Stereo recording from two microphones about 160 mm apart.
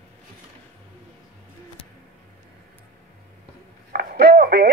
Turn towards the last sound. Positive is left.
turn(degrees=-90)